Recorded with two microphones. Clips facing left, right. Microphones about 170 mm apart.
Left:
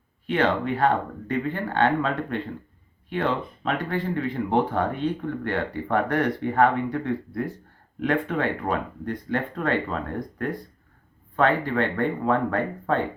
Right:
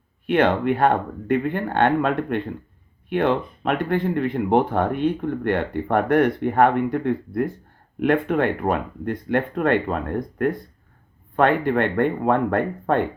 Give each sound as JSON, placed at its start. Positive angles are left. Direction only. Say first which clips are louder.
{"t": 0.3, "sound": "speech", "louder": "right 4 dB", "side_deg": -60}